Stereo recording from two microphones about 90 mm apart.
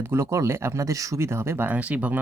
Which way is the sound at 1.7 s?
15° right (ahead or behind).